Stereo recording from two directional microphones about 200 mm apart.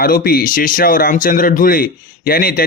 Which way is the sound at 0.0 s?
45° left (ahead or behind).